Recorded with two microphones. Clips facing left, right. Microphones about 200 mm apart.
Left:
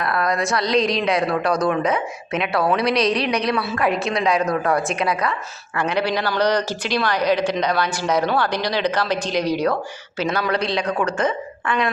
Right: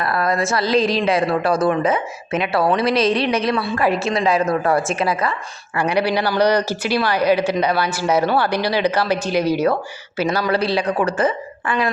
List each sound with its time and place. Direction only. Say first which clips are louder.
0.0 s a woman's voice: right 2 dB; centre (ahead or behind)